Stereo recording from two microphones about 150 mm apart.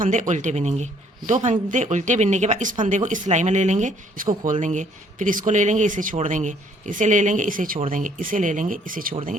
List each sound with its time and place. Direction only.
0.0 s speech: 55° right (ahead or behind)